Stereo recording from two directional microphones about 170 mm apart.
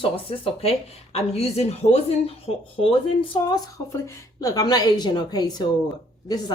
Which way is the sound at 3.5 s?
20° left (ahead or behind).